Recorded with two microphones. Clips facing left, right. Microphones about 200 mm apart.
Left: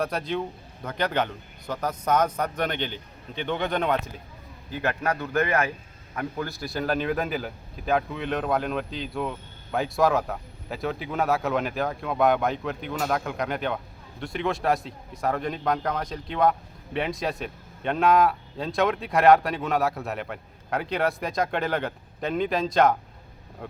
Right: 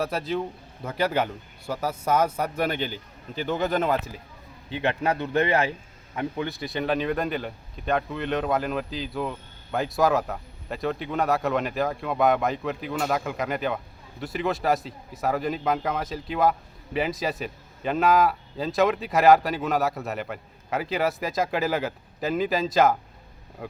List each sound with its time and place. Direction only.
0.0 s a man's voice: 5° right (ahead or behind)
4.7 s speech: 25° right (ahead or behind)
6.5 s a man's voice: centre (ahead or behind)